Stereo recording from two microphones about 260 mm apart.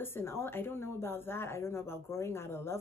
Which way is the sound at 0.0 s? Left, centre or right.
Centre.